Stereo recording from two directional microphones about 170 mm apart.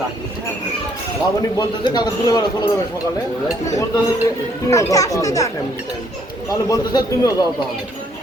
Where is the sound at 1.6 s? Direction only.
25° left (ahead or behind).